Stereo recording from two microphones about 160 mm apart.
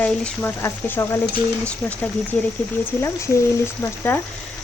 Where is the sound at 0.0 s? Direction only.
15° left (ahead or behind).